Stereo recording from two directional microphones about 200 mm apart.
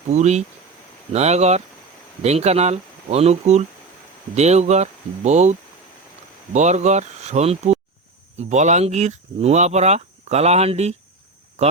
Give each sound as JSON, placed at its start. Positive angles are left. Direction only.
{"t": 0.1, "sound": "speech", "side_deg": -35}